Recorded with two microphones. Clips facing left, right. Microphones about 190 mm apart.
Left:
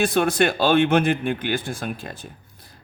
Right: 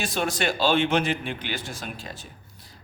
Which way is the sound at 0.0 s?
55° left (ahead or behind).